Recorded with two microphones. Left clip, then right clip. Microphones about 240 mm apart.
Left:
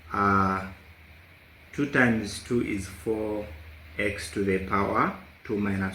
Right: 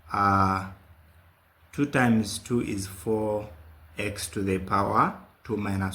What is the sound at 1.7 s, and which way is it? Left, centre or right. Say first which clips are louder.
Speech: left 1 dB; right.